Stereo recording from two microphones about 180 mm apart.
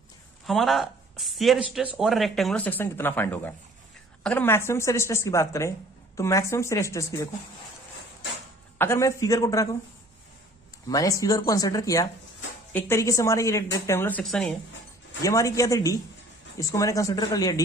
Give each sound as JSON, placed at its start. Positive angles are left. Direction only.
{"t": 0.4, "sound": "speech", "side_deg": 0}
{"t": 8.8, "sound": "speech", "side_deg": 15}
{"t": 10.8, "sound": "speech", "side_deg": 20}
{"t": 15.2, "sound": "speech", "side_deg": 20}